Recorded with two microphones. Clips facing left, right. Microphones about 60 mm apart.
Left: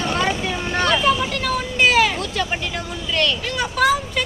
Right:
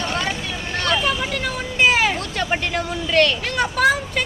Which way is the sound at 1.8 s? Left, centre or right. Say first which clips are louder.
Left 1 dB; centre.